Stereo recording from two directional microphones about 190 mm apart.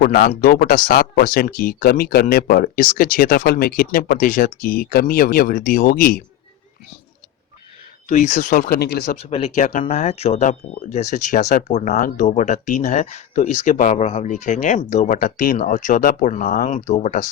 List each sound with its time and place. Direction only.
0.0 s speech: 50° left (ahead or behind)
8.0 s speech: 40° left (ahead or behind); by 9.1 s 55° left (ahead or behind)
9.2 s speech: 30° left (ahead or behind)